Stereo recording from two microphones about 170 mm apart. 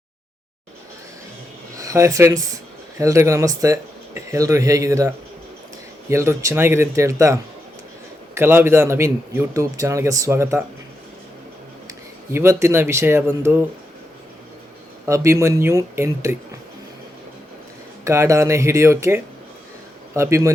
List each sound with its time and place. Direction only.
1.7 s a man's voice: 20° right (ahead or behind)
8.4 s a man's voice: 15° right (ahead or behind)
12.3 s a man's voice: 15° right (ahead or behind)
15.0 s a man's voice: 15° right (ahead or behind)
18.0 s a man's voice: 15° right (ahead or behind)